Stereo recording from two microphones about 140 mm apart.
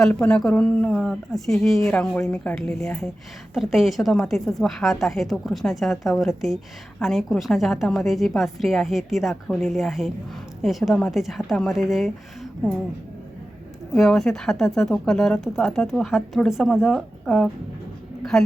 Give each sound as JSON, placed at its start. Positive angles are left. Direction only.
{"t": 0.0, "sound": "speech", "side_deg": 5}
{"t": 13.9, "sound": "speech", "side_deg": 5}